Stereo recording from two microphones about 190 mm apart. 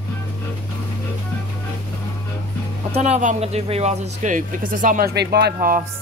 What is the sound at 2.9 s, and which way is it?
Speech, 35° right (ahead or behind).